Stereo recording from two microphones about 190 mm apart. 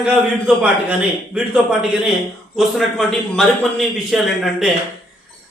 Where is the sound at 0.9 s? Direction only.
5° right (ahead or behind).